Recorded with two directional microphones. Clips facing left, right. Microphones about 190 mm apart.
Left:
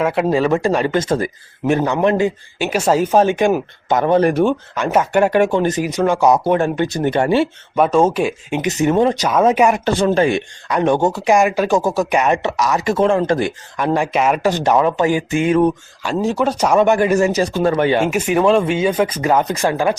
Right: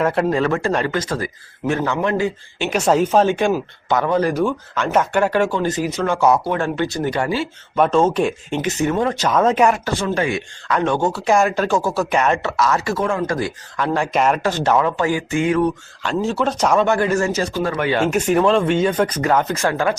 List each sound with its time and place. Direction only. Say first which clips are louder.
0.0 s speech: left 2 dB; 5° left (ahead or behind)
0.9 s speech: left 5 dB; 25° left (ahead or behind)
2.6 s speech: left 1 dB; 10° left (ahead or behind); by 4.5 s 25° left (ahead or behind)
4.7 s speech: left 2 dB; 10° left (ahead or behind); by 7.4 s 25° left (ahead or behind)
7.8 s speech: left 2 dB; 10° left (ahead or behind)
9.2 s speech: left 2 dB; 10° left (ahead or behind)
9.8 s speech: left 6 dB; 35° left (ahead or behind)
10.7 s speech: left 3 dB; 20° left (ahead or behind)
16.0 s speech: left 2 dB; 15° left (ahead or behind)
18.0 s speech: left 1 dB; 5° left (ahead or behind)